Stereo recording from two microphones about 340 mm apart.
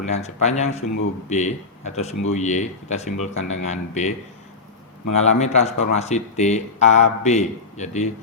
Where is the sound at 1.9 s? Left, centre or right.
Centre.